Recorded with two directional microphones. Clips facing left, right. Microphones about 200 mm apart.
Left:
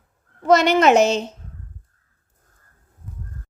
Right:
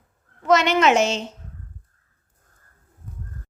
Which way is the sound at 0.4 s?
35° left (ahead or behind).